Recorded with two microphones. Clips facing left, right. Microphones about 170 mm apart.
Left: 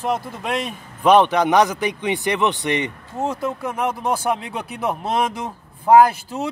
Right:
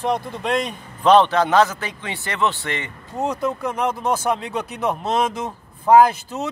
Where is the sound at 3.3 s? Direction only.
10° left (ahead or behind).